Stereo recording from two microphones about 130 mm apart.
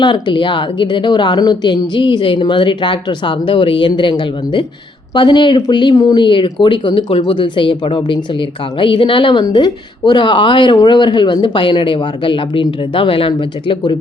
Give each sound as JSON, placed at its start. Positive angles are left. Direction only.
{"t": 0.0, "sound": "a woman's voice", "side_deg": 35}
{"t": 5.1, "sound": "a woman's voice", "side_deg": 35}